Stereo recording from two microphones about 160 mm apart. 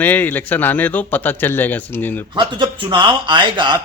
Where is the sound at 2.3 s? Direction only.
30° right (ahead or behind).